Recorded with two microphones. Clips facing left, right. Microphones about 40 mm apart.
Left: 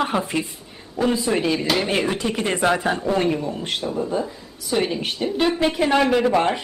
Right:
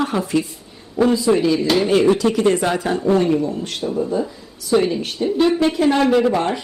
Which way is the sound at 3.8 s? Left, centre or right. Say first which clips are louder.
Right 5 dB; centre.